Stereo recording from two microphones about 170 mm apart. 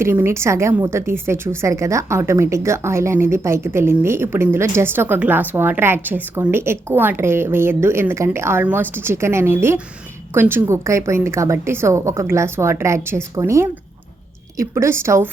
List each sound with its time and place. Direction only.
0.0 s a woman's voice: 15° right (ahead or behind)